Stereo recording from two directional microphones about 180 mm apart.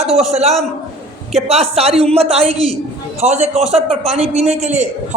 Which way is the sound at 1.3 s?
35° right (ahead or behind).